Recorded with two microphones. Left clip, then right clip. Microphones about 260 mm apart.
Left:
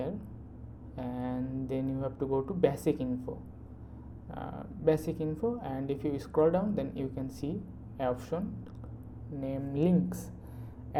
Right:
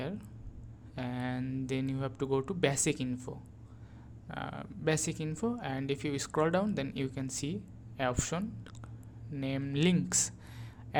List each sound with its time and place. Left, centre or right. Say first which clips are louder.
0.9 s a woman's voice: left 1 dB; right